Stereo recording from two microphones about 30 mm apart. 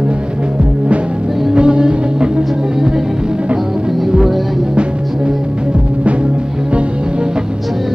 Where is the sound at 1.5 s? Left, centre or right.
Right.